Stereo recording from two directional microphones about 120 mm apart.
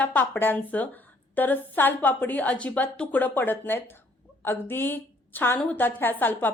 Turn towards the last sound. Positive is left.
turn(degrees=15)  # may be behind; listen again after turning